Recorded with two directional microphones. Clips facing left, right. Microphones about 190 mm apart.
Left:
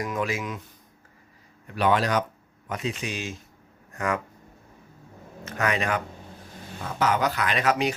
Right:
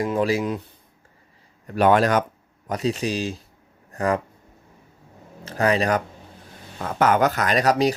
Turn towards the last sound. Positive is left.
turn(degrees=-35)  # may be behind; listen again after turning